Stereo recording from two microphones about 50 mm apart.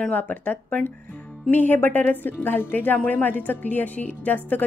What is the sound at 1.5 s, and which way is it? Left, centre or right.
A woman's voice, left.